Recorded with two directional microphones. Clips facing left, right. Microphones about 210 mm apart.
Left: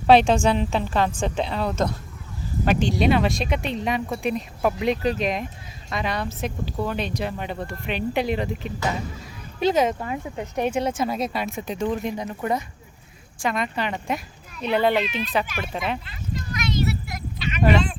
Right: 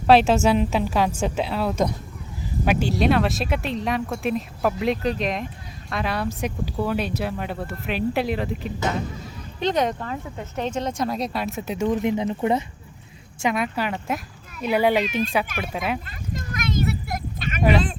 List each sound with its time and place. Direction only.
0.1 s a woman's voice: 5° right (ahead or behind)
12.0 s speech: 20° right (ahead or behind)
13.5 s a woman's voice: 5° right (ahead or behind)
16.0 s a sound: 50° right (ahead or behind)